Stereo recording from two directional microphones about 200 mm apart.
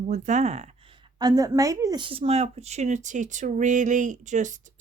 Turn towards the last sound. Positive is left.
turn(degrees=-40)  # may be behind; listen again after turning